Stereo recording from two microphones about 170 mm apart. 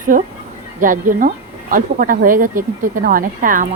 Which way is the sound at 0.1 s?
55° right (ahead or behind).